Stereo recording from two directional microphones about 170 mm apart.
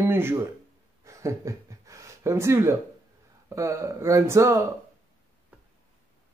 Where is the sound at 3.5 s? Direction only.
15° right (ahead or behind).